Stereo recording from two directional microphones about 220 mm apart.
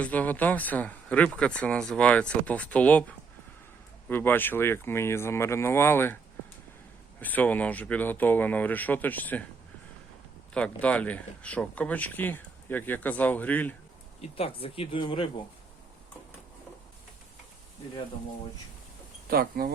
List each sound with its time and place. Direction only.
0.0 s speech: 5° left (ahead or behind)
7.2 s speech: 5° left (ahead or behind)
10.5 s speech: 5° left (ahead or behind)
14.2 s speech: 25° left (ahead or behind)
19.3 s speech: 45° right (ahead or behind)